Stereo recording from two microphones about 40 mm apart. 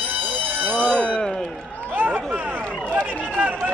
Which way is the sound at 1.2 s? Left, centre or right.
Centre.